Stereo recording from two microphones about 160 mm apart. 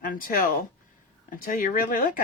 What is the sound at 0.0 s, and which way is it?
Speech, 60° left (ahead or behind).